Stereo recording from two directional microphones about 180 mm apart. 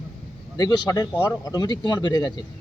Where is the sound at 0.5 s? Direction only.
20° left (ahead or behind).